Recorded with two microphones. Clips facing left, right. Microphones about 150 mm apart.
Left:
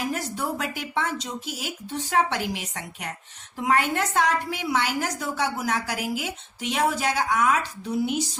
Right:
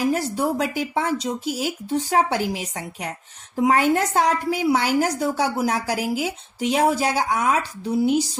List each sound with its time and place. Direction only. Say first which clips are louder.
0.1 s a woman's voice: right 7 dB; 35° right (ahead or behind)